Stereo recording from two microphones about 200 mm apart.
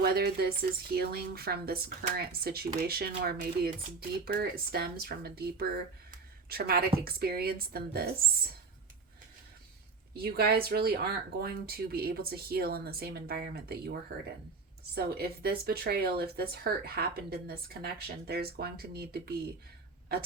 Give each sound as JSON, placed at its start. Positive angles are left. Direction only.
{"t": 0.0, "sound": "speech", "side_deg": -50}
{"t": 10.2, "sound": "speech", "side_deg": -50}